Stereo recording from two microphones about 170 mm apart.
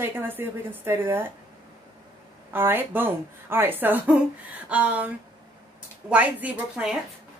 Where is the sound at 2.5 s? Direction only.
10° right (ahead or behind).